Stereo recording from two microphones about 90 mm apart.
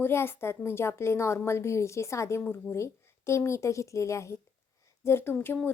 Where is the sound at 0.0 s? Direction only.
25° left (ahead or behind).